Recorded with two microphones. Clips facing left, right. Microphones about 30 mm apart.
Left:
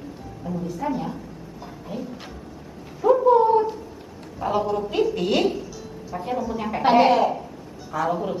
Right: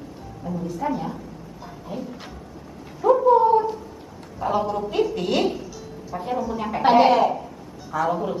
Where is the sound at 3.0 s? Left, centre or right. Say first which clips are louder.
Even; centre.